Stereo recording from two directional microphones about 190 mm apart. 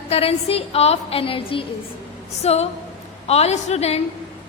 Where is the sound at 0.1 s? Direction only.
30° left (ahead or behind).